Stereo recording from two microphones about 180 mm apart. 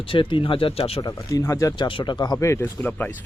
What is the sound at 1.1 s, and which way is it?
Speech, 15° left (ahead or behind).